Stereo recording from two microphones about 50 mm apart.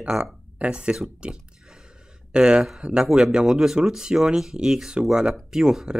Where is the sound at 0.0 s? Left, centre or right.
Right.